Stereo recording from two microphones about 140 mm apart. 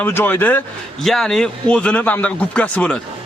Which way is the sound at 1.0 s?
5° left (ahead or behind).